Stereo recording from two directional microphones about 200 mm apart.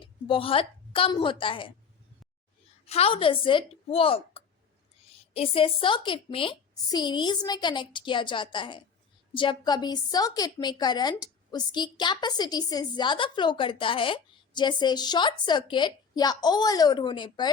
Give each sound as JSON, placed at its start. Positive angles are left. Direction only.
{"t": 0.0, "sound": "a woman's voice", "side_deg": 25}
{"t": 2.8, "sound": "a woman's voice", "side_deg": 30}